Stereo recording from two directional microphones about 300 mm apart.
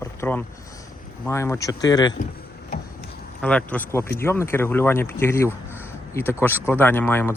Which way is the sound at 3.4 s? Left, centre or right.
Centre.